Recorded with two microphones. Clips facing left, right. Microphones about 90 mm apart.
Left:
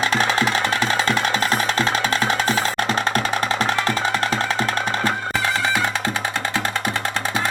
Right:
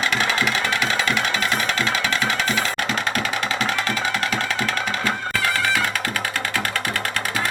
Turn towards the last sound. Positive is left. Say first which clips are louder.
# left 2 dB
turn(degrees=25)  # may be behind; listen again after turning